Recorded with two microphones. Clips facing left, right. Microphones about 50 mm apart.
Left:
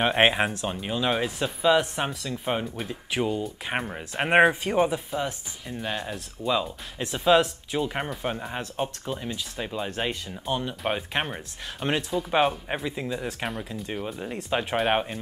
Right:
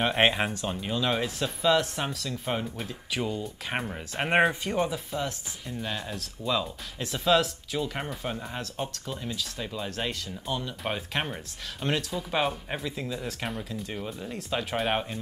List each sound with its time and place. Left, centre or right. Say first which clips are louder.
0.1 s speech: left 3 dB; centre